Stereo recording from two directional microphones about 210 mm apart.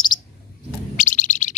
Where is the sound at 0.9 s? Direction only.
35° left (ahead or behind).